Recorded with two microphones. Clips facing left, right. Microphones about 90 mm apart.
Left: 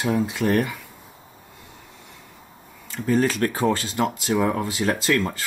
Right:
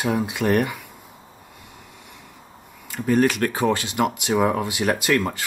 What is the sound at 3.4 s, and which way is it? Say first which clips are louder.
Speech: even; 90° right.